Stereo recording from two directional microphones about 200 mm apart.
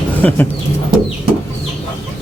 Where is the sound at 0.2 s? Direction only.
10° left (ahead or behind).